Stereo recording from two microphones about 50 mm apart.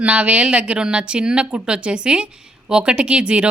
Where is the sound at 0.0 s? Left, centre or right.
Right.